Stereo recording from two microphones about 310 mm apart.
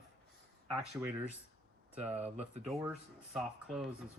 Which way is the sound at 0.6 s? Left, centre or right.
Centre.